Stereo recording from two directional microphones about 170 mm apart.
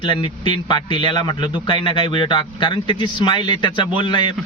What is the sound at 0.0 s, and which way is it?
Speech, 30° left (ahead or behind).